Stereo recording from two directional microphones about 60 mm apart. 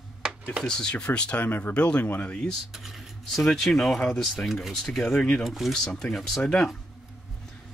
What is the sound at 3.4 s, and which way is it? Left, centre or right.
Speech, centre.